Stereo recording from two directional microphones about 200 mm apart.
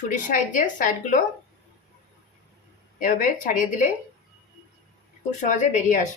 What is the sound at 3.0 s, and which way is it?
Speech, 40° left (ahead or behind).